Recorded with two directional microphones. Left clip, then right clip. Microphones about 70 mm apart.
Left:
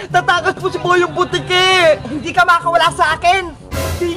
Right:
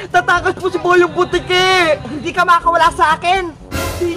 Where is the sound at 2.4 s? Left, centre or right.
Centre.